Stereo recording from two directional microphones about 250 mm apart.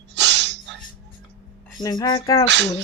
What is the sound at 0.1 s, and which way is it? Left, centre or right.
Snort, right.